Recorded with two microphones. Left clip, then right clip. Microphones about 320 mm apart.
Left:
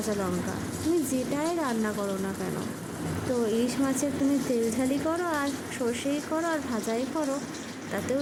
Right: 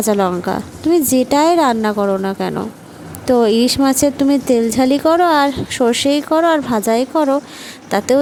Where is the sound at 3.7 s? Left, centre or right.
Right.